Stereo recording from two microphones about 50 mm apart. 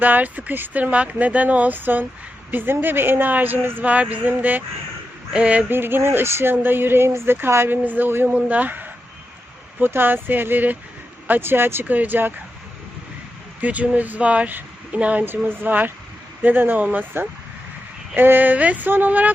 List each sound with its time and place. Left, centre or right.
0.0 s a woman's voice: right
3.8 s speech: right
5.3 s speech: right
5.6 s a woman's voice: right
6.5 s a woman's voice: right
7.9 s a woman's voice: right
8.3 s a woman's voice: right
11.9 s speech: right
13.6 s speech: right
15.2 s speech: right
18.1 s speech: right